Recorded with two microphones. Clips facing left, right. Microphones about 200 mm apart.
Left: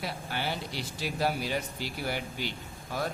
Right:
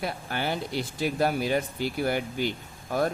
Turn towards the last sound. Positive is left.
turn(degrees=-50)  # may be behind; listen again after turning